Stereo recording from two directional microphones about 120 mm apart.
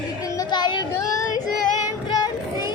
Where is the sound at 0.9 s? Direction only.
30° left (ahead or behind).